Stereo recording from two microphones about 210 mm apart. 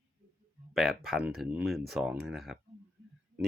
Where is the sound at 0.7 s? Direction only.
Centre (ahead or behind).